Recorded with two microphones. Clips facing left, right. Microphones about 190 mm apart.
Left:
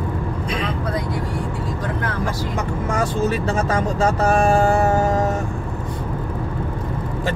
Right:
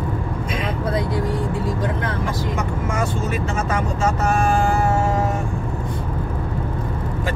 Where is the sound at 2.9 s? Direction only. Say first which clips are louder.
Left 5 dB; 35° left (ahead or behind).